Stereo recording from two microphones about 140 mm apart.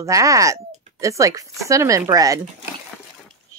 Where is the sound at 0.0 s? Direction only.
25° right (ahead or behind).